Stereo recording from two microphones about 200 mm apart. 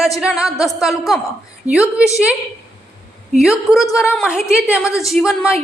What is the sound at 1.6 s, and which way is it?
Speech, 35° right (ahead or behind).